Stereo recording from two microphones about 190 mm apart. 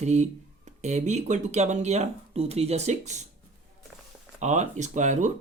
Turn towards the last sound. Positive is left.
turn(degrees=-40)  # may be behind; listen again after turning